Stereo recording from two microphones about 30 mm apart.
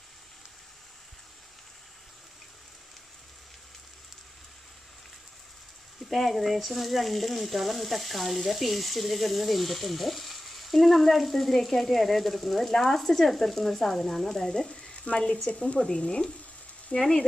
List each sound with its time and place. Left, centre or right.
6.0 s frying: centre
15.1 s speech: left
15.5 s speech: left
16.9 s speech: left